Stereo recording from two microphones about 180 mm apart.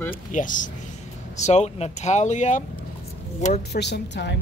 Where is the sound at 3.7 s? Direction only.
70° left (ahead or behind).